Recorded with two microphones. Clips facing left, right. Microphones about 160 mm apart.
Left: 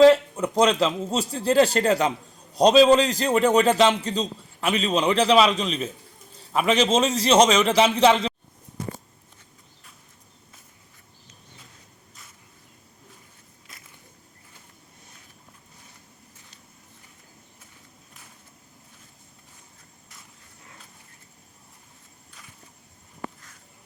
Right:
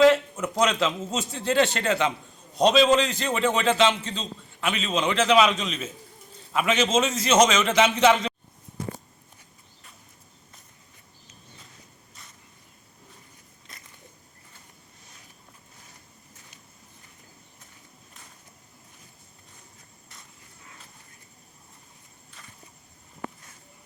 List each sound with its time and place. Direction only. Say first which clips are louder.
0.0 s a sound: left 4 dB; 35° left (ahead or behind)
0.6 s a man's voice: left 4 dB; 35° left (ahead or behind)
13.7 s biting: right 1 dB; centre (ahead or behind)